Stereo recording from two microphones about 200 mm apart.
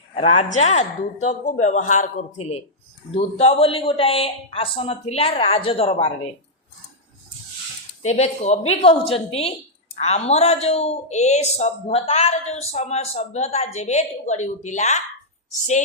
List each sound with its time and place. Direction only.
0.2 s a woman's voice: 35° left (ahead or behind)
8.0 s a woman's voice: 35° left (ahead or behind)